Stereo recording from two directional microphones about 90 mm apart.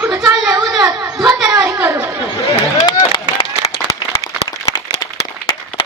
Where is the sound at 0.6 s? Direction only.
50° right (ahead or behind).